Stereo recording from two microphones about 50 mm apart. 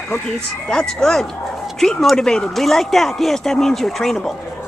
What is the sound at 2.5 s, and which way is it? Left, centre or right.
Speech, centre.